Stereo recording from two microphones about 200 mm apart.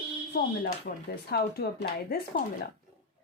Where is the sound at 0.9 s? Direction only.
50° left (ahead or behind).